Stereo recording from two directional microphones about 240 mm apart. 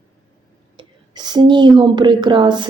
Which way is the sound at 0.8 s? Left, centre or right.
Centre.